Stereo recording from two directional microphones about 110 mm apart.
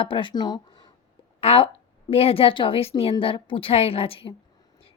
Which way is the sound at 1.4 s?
60° left (ahead or behind).